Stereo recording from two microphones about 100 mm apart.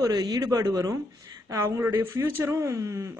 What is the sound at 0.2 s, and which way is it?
A man's voice, 35° right (ahead or behind).